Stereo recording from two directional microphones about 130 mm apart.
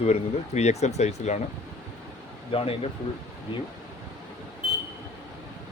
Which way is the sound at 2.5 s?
50° left (ahead or behind).